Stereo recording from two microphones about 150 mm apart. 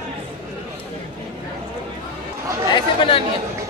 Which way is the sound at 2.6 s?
30° left (ahead or behind).